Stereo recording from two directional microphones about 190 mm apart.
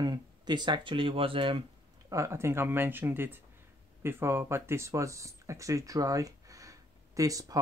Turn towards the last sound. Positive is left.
turn(degrees=-20)  # may be behind; listen again after turning